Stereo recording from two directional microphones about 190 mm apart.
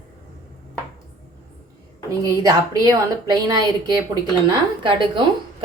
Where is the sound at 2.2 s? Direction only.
20° right (ahead or behind).